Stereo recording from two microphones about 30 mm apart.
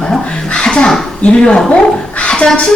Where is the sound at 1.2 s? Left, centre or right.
Left.